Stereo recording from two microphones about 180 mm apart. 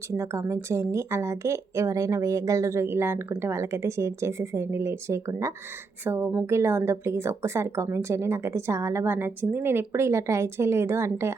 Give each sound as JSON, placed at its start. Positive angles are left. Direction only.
{"t": 0.1, "sound": "speech", "side_deg": -15}